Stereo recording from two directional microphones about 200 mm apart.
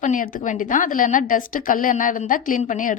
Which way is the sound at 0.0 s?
40° left (ahead or behind).